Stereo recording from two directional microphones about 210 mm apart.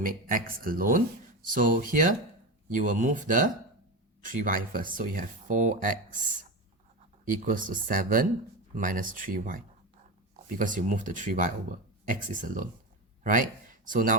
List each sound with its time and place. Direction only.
0.0 s speech: 40° right (ahead or behind)
7.3 s speech: 40° right (ahead or behind)
10.6 s speech: 35° right (ahead or behind)